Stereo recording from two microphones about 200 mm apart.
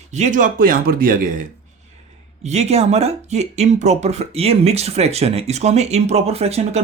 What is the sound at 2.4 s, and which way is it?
Speech, 35° right (ahead or behind).